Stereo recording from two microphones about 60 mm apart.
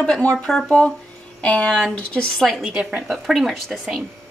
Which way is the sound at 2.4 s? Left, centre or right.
Centre.